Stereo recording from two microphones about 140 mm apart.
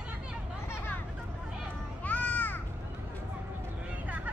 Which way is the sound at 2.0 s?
10° left (ahead or behind).